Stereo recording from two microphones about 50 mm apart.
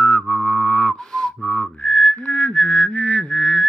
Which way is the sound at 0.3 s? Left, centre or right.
Centre.